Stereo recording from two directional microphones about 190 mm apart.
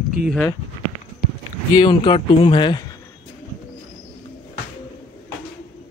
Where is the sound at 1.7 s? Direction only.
25° left (ahead or behind).